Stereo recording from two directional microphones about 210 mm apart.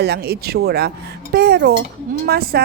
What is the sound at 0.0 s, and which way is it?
A woman's voice, 50° right (ahead or behind).